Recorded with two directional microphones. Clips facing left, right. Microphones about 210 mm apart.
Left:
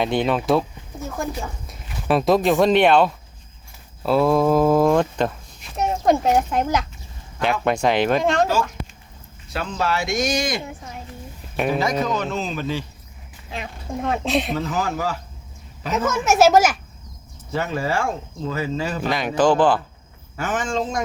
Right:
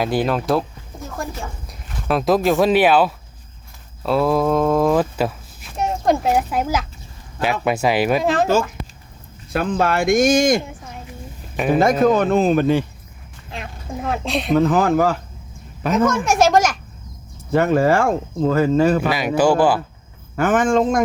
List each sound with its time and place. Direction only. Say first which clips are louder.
0.0 s speech: right 1 dB; 5° right (ahead or behind)
1.6 s speech: even; centre (ahead or behind)
9.5 s speech: right 5 dB; 55° right (ahead or behind)
11.7 s speech: right 9 dB; 50° right (ahead or behind)
13.5 s speech: left 1 dB; centre (ahead or behind)
14.5 s speech: right 9 dB; 55° right (ahead or behind)
16.0 s speech: left 3 dB; 5° left (ahead or behind)
17.5 s speech: right 8 dB; 55° right (ahead or behind)
19.4 s speech: right 1 dB; 10° right (ahead or behind)
20.3 s speech: right 8 dB; 55° right (ahead or behind)